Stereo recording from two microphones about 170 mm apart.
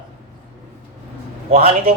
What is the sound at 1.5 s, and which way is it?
Speech, 35° right (ahead or behind).